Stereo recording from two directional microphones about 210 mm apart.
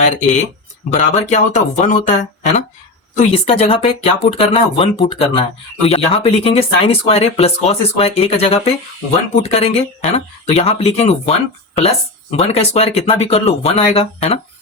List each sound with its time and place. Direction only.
0.0 s speech: 35° left (ahead or behind)